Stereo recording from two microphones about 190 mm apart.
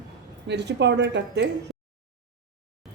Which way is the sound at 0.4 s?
65° right (ahead or behind).